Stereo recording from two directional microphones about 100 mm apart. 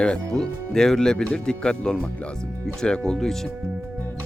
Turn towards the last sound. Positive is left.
turn(degrees=5)  # may be behind; listen again after turning